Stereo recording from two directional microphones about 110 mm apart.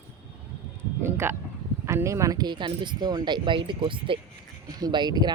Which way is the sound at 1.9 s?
25° right (ahead or behind).